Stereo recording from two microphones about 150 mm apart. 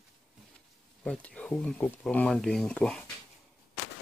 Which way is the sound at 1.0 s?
5° left (ahead or behind).